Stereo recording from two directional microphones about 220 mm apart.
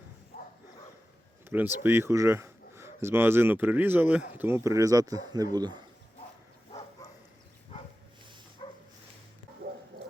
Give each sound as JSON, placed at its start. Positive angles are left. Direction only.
{"t": 0.3, "sound": "dog", "side_deg": 45}
{"t": 1.5, "sound": "speech", "side_deg": -10}
{"t": 8.6, "sound": "dog", "side_deg": 20}